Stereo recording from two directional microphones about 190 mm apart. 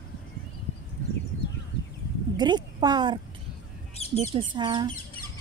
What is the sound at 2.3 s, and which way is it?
Speech, 20° right (ahead or behind).